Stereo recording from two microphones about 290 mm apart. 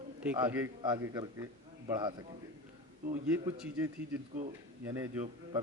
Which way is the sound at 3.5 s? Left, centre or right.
Centre.